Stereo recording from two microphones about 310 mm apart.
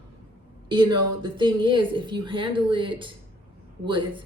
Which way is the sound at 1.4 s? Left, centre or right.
Centre.